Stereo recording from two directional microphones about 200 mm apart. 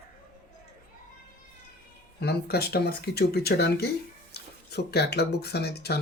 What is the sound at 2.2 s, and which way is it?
Speech, 50° left (ahead or behind).